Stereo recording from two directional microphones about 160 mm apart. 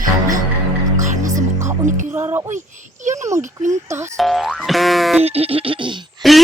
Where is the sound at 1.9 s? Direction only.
50° right (ahead or behind).